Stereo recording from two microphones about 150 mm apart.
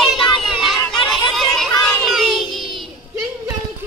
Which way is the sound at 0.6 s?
Centre (ahead or behind).